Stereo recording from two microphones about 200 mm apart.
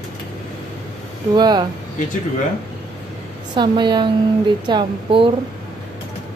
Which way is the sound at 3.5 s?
20° right (ahead or behind).